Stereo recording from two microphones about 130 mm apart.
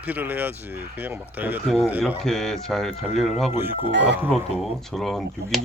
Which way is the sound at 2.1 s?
5° left (ahead or behind).